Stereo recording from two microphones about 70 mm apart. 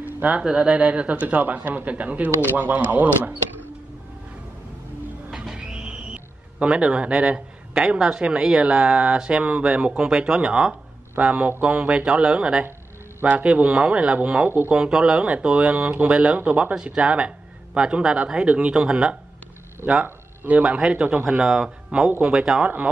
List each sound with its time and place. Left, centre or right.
0.0 s a sound: right
0.4 s speech: centre
5.3 s speech: centre
22.6 s speech: right